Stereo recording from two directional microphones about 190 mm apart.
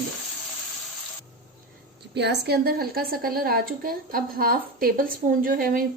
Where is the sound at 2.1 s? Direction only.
65° right (ahead or behind).